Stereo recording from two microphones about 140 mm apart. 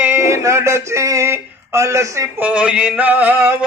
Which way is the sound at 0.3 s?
20° right (ahead or behind).